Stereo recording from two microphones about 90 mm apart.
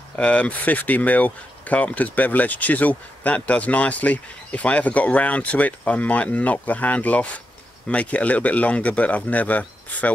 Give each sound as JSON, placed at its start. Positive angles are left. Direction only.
{"t": 0.1, "sound": "speech", "side_deg": 15}